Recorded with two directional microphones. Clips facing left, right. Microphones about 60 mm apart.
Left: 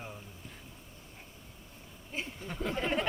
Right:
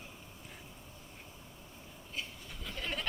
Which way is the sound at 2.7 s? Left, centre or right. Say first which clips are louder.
Left 7 dB; left.